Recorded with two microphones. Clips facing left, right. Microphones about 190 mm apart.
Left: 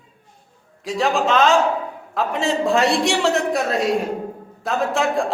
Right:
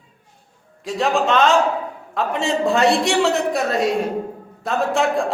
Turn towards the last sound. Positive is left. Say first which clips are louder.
# right 1 dB
turn(degrees=0)  # may be behind; listen again after turning